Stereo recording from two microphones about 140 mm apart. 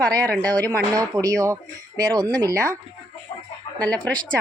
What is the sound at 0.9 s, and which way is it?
Speech, 25° right (ahead or behind).